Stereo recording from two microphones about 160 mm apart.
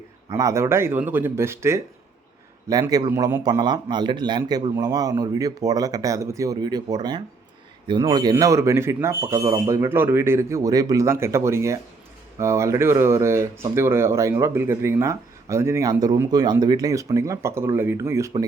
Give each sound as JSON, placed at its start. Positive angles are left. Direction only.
{"t": 0.3, "sound": "speech", "side_deg": -20}